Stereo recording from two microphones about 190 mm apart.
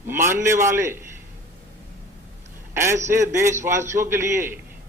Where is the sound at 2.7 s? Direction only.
15° right (ahead or behind).